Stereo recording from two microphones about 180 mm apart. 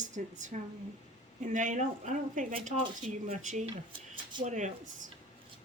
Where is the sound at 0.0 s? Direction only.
45° right (ahead or behind).